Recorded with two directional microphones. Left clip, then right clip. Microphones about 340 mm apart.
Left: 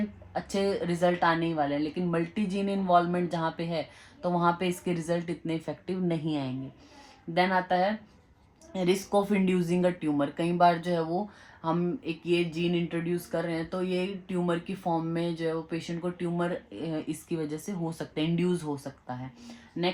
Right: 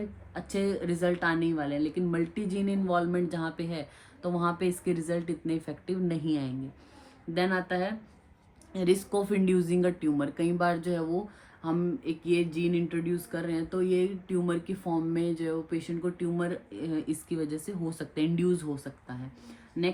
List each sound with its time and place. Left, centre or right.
0.5 s speech: left
19.8 s speech: left